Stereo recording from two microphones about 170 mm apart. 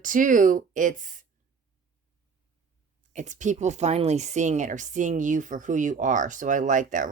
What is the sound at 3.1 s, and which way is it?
Speech, 45° right (ahead or behind).